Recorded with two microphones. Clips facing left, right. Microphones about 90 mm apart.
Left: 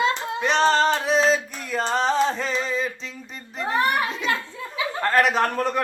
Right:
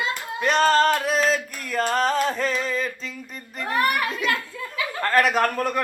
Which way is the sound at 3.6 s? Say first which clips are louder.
Left 1 dB; 25° left (ahead or behind).